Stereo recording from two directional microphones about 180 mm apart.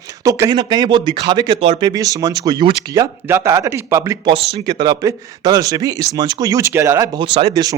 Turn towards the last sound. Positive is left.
turn(degrees=-20)  # may be behind; listen again after turning